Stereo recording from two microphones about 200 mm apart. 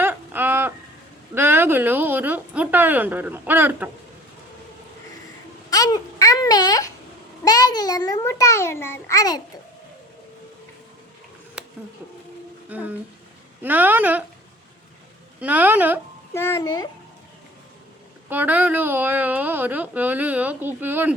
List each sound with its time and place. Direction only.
0.0 s a sound: 10° right (ahead or behind)
1.4 s a woman's voice: 10° right (ahead or behind)
5.7 s a sound: 20° left (ahead or behind)
7.4 s a child's voice: 20° left (ahead or behind)
12.6 s a woman's voice: 10° right (ahead or behind)
15.4 s a woman's voice: 5° right (ahead or behind)
16.3 s a child's voice: 15° left (ahead or behind)
18.3 s a woman's voice: 10° right (ahead or behind)